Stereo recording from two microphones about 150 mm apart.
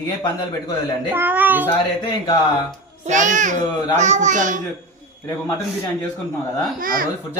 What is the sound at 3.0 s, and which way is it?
A child's voice, 55° right (ahead or behind).